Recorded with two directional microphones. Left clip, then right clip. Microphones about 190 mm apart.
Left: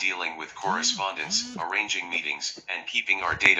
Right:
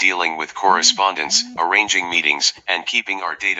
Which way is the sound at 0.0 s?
40° right (ahead or behind).